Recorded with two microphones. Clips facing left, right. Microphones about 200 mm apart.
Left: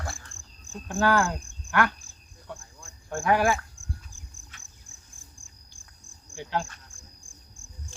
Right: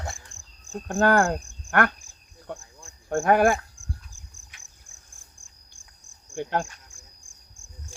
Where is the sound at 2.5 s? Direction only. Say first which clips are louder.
Right 4 dB; 55° right (ahead or behind).